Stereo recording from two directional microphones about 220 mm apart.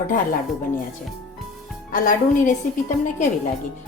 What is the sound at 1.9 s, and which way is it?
Speech, 35° left (ahead or behind).